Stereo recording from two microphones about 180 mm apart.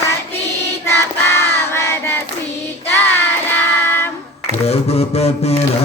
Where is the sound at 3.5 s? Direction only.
10° left (ahead or behind).